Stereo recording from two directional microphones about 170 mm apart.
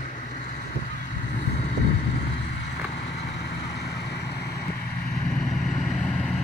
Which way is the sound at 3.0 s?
75° left (ahead or behind).